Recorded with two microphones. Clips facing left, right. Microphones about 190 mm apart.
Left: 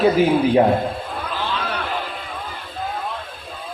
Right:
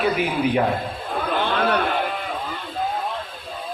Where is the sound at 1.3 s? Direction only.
60° right (ahead or behind).